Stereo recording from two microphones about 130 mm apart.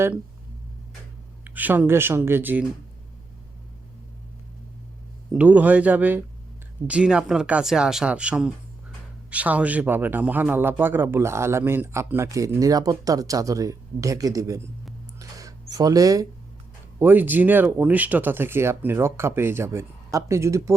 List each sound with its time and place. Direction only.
1.5 s speech: 15° right (ahead or behind)
5.4 s speech: 10° right (ahead or behind)
15.2 s a sound: 25° right (ahead or behind)
17.0 s speech: 15° right (ahead or behind)